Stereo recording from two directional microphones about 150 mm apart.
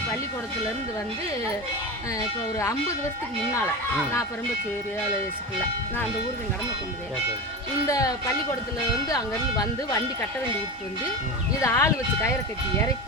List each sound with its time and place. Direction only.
7.9 s speech: 25° left (ahead or behind)
11.6 s speech: 20° left (ahead or behind)